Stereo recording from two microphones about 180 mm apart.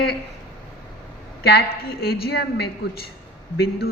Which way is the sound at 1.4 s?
60° left (ahead or behind).